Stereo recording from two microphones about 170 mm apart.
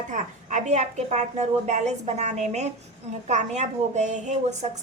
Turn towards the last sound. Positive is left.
turn(degrees=-45)  # may be behind; listen again after turning